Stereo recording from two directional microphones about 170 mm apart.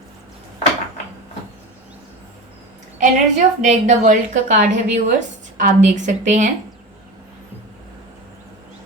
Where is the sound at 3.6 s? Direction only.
45° right (ahead or behind).